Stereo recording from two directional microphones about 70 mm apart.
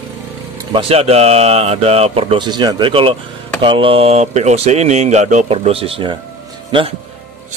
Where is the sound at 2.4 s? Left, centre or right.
Right.